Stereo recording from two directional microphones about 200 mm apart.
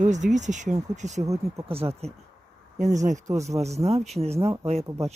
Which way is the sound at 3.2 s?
15° right (ahead or behind).